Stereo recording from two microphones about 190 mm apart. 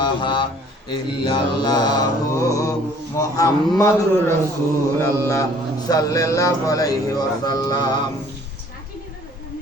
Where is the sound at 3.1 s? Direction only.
20° left (ahead or behind).